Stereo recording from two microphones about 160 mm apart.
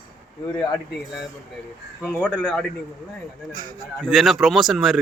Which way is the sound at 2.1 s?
5° left (ahead or behind).